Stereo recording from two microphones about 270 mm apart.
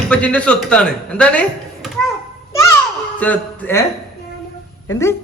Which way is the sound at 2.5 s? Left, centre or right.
Centre.